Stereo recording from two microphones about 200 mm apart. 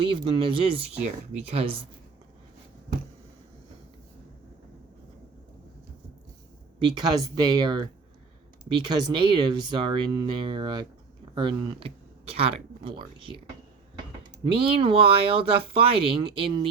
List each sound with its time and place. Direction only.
0.1 s speech: 25° right (ahead or behind)
6.8 s speech: 20° right (ahead or behind)
14.4 s speech: 25° right (ahead or behind)